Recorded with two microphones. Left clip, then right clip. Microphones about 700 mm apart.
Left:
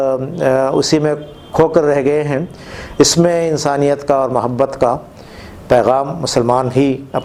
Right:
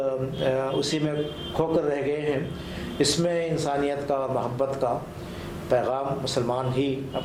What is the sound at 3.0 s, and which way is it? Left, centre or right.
Speech, left.